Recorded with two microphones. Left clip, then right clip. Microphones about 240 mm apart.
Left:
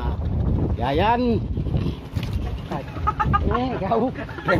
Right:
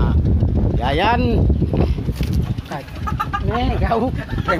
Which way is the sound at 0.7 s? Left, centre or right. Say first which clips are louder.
Right 3 dB; centre.